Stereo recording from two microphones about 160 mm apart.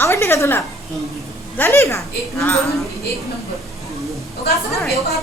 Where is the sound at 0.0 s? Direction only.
15° left (ahead or behind).